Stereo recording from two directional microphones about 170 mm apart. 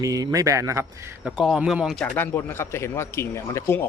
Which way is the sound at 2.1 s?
10° left (ahead or behind).